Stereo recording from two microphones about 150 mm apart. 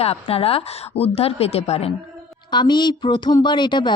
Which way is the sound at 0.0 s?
40° left (ahead or behind).